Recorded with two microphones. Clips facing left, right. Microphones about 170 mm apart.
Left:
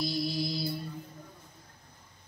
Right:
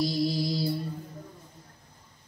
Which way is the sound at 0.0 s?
35° right (ahead or behind).